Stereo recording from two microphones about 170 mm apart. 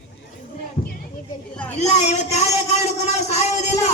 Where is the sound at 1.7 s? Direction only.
40° left (ahead or behind).